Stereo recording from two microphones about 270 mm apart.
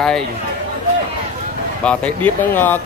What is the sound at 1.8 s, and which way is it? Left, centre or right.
Speech, centre.